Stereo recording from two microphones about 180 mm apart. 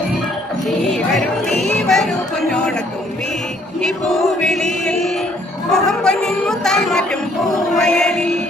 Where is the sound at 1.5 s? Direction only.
Centre (ahead or behind).